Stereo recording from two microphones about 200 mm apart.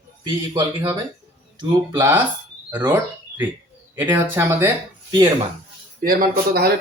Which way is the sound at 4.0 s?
10° right (ahead or behind).